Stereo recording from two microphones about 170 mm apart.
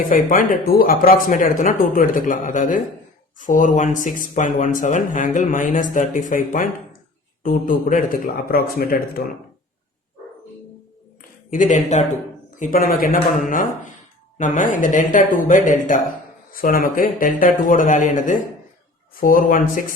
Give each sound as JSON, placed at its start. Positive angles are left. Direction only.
{"t": 0.1, "sound": "a man's voice", "side_deg": 55}
{"t": 11.5, "sound": "speech", "side_deg": 45}
{"t": 14.3, "sound": "speech", "side_deg": 50}